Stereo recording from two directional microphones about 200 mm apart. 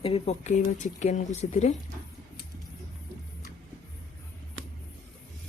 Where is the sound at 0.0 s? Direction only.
30° left (ahead or behind).